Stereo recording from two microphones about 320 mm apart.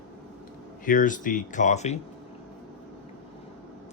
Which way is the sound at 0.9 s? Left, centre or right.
Left.